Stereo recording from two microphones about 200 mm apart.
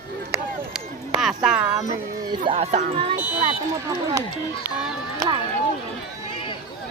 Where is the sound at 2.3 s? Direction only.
25° right (ahead or behind).